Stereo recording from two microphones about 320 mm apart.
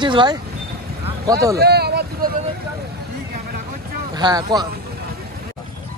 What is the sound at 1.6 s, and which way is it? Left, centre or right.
Vehicle, right.